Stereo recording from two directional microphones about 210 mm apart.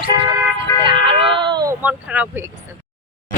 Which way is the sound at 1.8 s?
5° right (ahead or behind).